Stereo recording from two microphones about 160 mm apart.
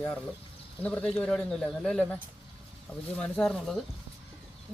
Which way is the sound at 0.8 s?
10° left (ahead or behind).